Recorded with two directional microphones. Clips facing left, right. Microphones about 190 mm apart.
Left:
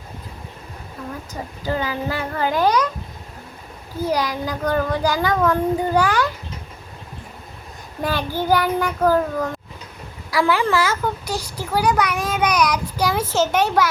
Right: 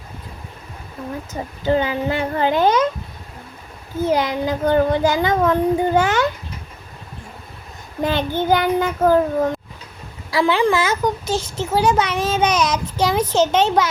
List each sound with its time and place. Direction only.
1.6 s a child's voice: 25° right (ahead or behind)
4.0 s a child's voice: 25° right (ahead or behind)
8.0 s a child's voice: 20° right (ahead or behind)